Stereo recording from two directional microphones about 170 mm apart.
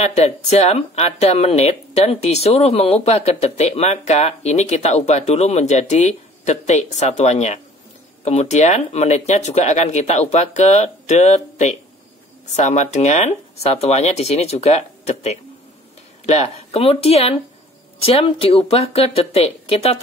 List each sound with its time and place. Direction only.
0.0 s speech: 40° left (ahead or behind)